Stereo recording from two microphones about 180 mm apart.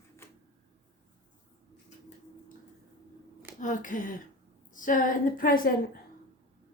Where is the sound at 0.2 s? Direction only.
15° left (ahead or behind).